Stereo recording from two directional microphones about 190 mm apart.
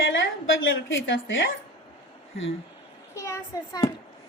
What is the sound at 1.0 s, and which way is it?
Speech, 80° left.